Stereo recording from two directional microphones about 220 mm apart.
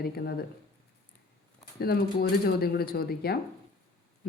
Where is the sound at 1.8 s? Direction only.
45° left (ahead or behind).